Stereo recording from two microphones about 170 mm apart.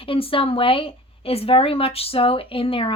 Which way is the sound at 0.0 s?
30° left (ahead or behind).